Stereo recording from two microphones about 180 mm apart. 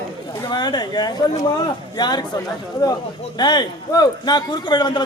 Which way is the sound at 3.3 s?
25° left (ahead or behind).